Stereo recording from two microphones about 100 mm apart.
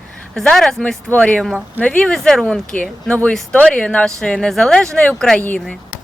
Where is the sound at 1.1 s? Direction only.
10° left (ahead or behind).